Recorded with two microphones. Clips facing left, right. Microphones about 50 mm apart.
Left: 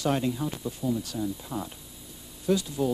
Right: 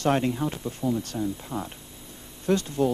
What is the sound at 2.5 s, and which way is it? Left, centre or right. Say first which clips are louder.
Speech: right 2 dB; right.